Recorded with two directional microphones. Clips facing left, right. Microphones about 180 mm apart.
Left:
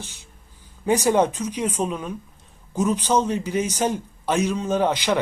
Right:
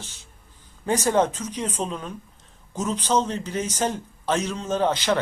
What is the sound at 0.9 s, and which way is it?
Speech, 10° left (ahead or behind).